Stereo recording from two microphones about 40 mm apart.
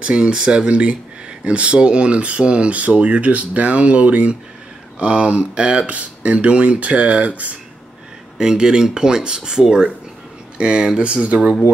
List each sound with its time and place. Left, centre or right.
0.0 s speech: right
5.9 s speech: right
8.4 s speech: centre